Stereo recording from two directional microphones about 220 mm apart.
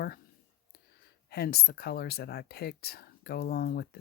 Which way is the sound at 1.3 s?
45° left (ahead or behind).